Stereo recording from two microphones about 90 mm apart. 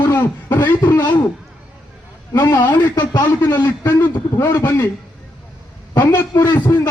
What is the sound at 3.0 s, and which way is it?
Speech, 50° left (ahead or behind).